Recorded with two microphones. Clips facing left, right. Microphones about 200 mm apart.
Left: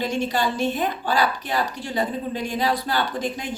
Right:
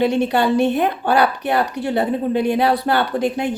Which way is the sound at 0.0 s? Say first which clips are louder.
Right 7 dB; 60° right (ahead or behind).